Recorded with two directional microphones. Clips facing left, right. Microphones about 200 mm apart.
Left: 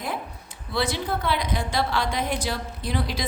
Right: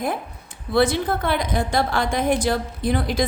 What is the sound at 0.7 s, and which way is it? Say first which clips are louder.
A woman's voice: right 7 dB; 50° right (ahead or behind).